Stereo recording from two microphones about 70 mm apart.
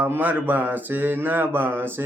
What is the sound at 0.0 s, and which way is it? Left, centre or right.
Mantra, right.